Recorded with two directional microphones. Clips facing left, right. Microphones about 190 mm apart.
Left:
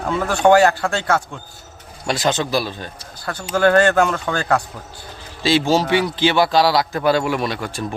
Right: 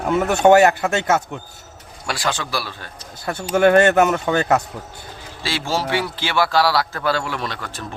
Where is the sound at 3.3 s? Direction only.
25° right (ahead or behind).